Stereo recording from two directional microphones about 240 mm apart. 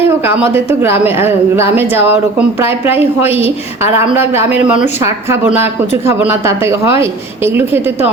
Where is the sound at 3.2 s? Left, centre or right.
Left.